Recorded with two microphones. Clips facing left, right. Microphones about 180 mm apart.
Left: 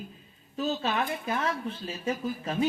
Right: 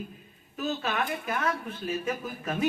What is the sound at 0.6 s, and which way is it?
Speech, 30° left (ahead or behind).